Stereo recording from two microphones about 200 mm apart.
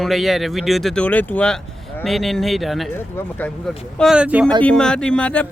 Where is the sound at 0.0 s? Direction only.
Centre (ahead or behind).